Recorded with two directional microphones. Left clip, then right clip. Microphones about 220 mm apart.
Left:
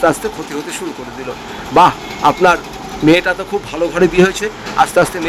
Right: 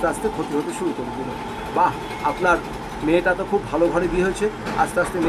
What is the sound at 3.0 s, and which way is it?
Speech, 50° left (ahead or behind).